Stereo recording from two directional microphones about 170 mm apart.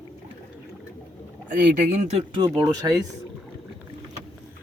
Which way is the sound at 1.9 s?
45° right (ahead or behind).